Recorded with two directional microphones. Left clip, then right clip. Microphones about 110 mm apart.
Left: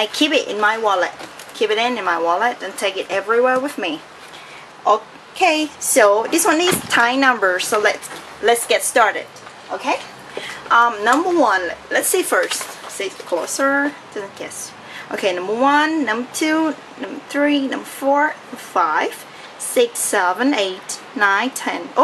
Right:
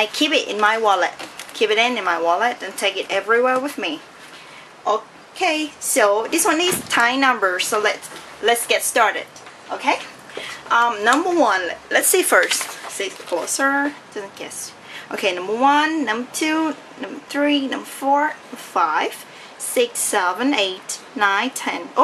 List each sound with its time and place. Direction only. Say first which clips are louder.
0.0 s speech: left 1 dB; centre (ahead or behind)
5.4 s speech: left 4 dB; 5° left (ahead or behind)
9.7 s speech: right 1 dB; 15° right (ahead or behind)